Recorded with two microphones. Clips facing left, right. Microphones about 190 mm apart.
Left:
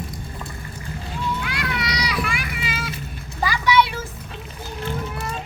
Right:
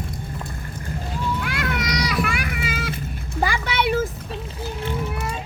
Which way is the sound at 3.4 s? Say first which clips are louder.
Left 4 dB; 50° right (ahead or behind).